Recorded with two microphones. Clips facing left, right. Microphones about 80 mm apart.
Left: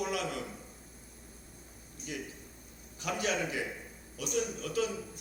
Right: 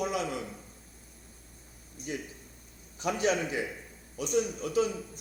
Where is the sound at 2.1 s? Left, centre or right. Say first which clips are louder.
Right 3 dB; right.